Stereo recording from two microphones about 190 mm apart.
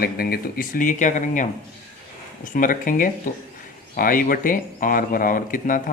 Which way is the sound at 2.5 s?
45° left (ahead or behind).